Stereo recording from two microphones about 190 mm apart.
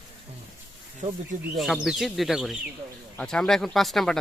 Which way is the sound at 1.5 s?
Centre (ahead or behind).